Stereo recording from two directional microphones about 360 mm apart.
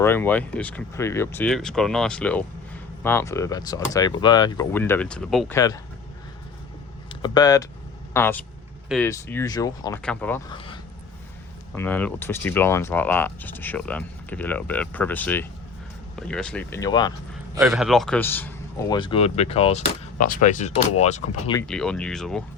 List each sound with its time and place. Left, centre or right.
0.0 s speech: centre
7.1 s speech: centre
17.5 s speech: centre
21.7 s speech: centre